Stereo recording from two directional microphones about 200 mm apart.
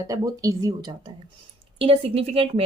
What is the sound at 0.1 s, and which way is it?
A woman's voice, 15° right (ahead or behind).